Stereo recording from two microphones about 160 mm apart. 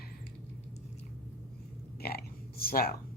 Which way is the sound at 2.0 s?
75° left (ahead or behind).